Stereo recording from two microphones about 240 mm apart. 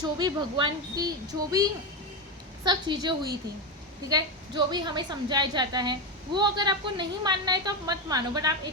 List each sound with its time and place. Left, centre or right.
0.0 s a woman's voice: centre